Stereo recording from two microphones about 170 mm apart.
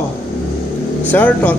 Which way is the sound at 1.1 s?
10° left (ahead or behind).